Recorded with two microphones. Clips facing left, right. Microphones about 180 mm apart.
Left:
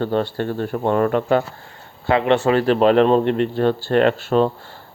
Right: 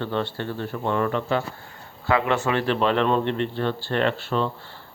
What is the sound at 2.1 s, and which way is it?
A man's voice, 30° left (ahead or behind).